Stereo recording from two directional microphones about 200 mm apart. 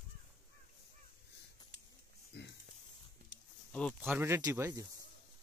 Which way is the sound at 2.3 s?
60° left (ahead or behind).